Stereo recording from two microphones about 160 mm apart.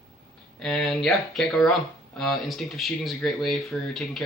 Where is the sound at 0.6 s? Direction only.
Centre (ahead or behind).